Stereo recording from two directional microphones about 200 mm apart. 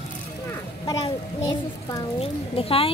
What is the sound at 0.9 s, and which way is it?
A child's voice, 20° left (ahead or behind).